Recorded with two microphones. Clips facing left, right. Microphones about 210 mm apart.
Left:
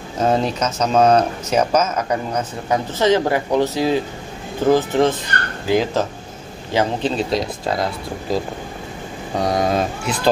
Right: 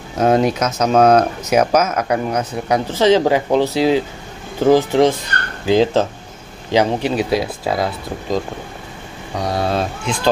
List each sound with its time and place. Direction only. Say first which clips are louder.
0.2 s speech: right 4 dB; 10° right (ahead or behind)
5.7 s speech: right 4 dB; 25° right (ahead or behind)
6.7 s speech: right 3 dB; 15° right (ahead or behind)
9.4 s speech: left 1 dB; 20° left (ahead or behind)